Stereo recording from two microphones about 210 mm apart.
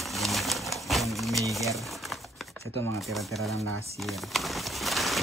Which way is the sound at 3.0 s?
Centre (ahead or behind).